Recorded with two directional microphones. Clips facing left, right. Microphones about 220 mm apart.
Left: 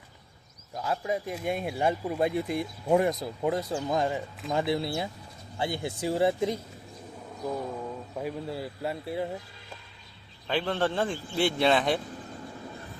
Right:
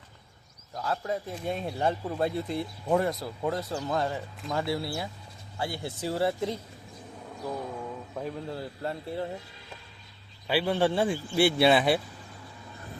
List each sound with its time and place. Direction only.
0.8 s speech: 15° left (ahead or behind)
8.1 s speech: 10° left (ahead or behind)
10.4 s speech: 10° right (ahead or behind)